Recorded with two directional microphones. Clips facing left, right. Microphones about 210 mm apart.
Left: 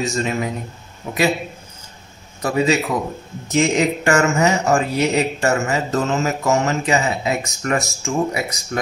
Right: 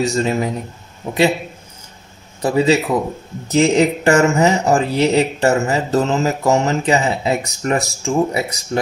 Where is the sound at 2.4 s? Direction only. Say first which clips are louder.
Right 3 dB; 30° right (ahead or behind).